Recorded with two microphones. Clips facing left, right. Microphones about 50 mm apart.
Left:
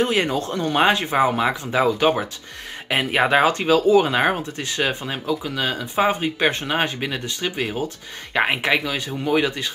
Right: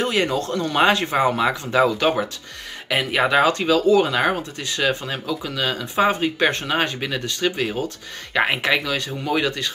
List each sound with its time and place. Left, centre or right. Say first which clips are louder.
0.0 s speech: left 1 dB; centre
2.9 s speech: left 1 dB; centre